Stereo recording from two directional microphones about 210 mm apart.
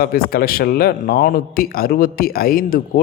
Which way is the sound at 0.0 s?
45° left (ahead or behind).